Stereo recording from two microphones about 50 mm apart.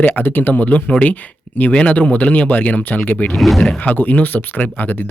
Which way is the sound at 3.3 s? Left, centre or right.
Centre.